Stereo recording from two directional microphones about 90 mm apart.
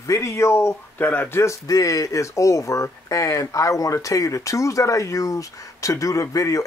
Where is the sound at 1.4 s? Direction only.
35° left (ahead or behind).